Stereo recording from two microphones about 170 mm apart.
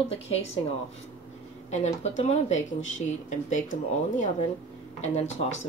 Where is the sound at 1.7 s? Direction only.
45° left (ahead or behind).